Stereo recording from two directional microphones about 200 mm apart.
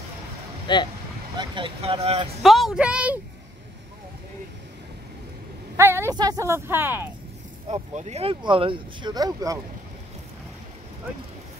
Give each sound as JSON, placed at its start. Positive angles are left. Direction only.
{"t": 0.7, "sound": "speech", "side_deg": 25}
{"t": 1.4, "sound": "speech", "side_deg": -25}
{"t": 2.4, "sound": "speech", "side_deg": 0}
{"t": 5.8, "sound": "speech", "side_deg": -10}
{"t": 7.7, "sound": "speech", "side_deg": -35}